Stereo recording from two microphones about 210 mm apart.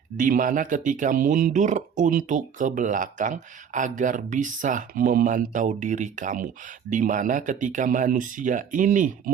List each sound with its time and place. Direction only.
0.2 s speech: 40° right (ahead or behind)